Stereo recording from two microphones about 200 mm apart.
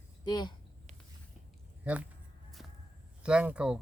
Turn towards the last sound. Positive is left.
turn(degrees=-5)  # may be behind; listen again after turning